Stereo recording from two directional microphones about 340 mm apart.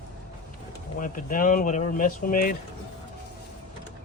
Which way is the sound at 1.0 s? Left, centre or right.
Left.